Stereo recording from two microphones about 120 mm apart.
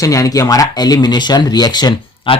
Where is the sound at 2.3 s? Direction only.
45° left (ahead or behind).